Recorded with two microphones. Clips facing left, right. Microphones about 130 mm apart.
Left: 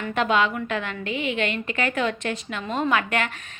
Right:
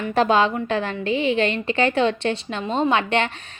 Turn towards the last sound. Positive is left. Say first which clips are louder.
# right 3 dB
turn(degrees=-30)  # may be behind; listen again after turning